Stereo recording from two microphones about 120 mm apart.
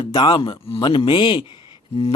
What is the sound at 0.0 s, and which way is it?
A man's voice, 40° left (ahead or behind).